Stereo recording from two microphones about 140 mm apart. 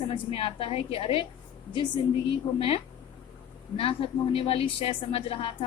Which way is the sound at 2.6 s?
40° left (ahead or behind).